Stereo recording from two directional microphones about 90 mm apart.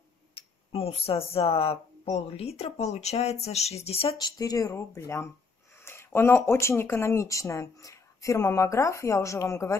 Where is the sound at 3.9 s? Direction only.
90° left.